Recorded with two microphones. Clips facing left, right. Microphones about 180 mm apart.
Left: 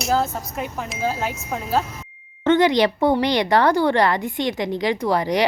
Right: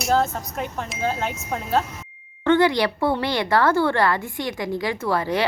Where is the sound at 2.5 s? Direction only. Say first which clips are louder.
Left 2 dB; 20° left (ahead or behind).